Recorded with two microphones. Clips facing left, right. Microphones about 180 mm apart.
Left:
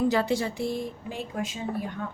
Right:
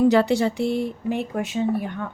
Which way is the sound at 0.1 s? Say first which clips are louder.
Right 7 dB; 70° right (ahead or behind).